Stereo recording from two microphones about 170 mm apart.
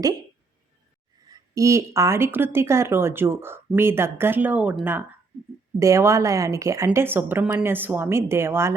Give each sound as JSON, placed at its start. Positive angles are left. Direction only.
{"t": 1.2, "sound": "speech", "side_deg": -20}